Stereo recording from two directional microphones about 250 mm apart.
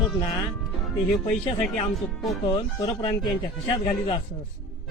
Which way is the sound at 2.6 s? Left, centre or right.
Centre.